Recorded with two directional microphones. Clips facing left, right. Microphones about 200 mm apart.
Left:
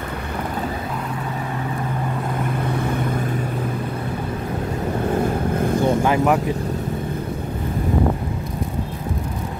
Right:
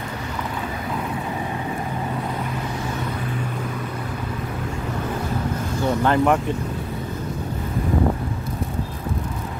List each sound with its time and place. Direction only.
5.6 s vehicle: 55° left (ahead or behind)
5.9 s speech: 10° left (ahead or behind)